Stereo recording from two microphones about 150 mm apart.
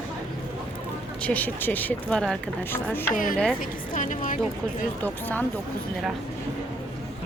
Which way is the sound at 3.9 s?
60° left (ahead or behind).